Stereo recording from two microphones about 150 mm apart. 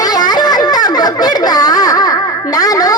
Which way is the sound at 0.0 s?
25° left (ahead or behind).